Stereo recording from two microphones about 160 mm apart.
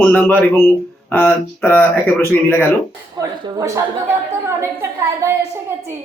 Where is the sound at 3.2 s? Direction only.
20° right (ahead or behind).